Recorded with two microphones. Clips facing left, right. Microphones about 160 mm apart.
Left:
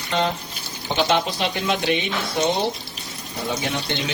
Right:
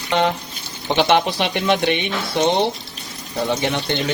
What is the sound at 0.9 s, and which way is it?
Speech, 70° right (ahead or behind).